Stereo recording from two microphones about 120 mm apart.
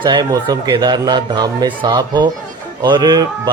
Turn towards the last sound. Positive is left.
turn(degrees=-35)  # may be behind; listen again after turning